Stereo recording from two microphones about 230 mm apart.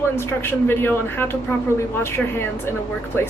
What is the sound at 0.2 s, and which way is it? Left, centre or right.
A woman's voice, centre.